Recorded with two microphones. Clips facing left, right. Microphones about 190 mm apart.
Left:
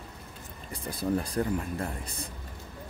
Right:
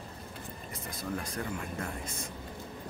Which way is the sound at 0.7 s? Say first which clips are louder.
Left 8 dB; 35° left (ahead or behind).